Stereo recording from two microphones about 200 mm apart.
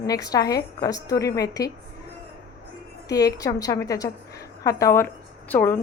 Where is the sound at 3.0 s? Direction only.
20° left (ahead or behind).